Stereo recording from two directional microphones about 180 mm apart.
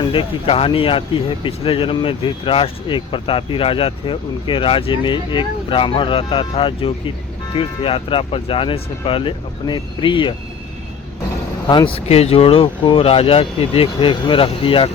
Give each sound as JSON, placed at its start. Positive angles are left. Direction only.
{"t": 0.0, "sound": "speech", "side_deg": 30}
{"t": 11.7, "sound": "speech", "side_deg": 25}